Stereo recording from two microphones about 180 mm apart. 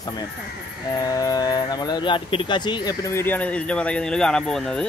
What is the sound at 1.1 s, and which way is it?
Speech, 20° left (ahead or behind).